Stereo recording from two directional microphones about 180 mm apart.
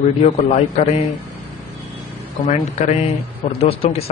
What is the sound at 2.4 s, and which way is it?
Speech, 40° left (ahead or behind).